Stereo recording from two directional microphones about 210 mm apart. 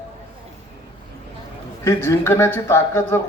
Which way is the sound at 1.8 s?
10° left (ahead or behind).